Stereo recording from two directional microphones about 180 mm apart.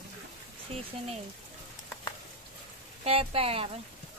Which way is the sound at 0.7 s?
30° right (ahead or behind).